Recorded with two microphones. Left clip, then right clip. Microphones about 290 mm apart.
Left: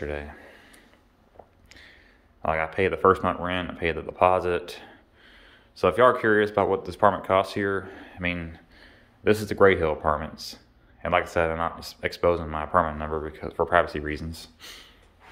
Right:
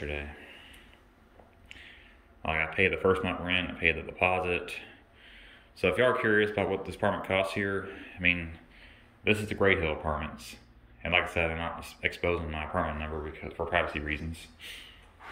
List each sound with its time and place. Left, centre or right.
0.0 s speech: centre
2.4 s speech: centre